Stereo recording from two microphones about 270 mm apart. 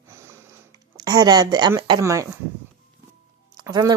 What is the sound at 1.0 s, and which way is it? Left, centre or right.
Speech, centre.